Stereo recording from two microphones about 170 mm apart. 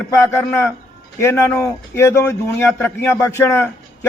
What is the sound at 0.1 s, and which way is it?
A man's voice, 15° left (ahead or behind).